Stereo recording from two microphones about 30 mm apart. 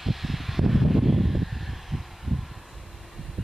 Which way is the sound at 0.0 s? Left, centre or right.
Centre.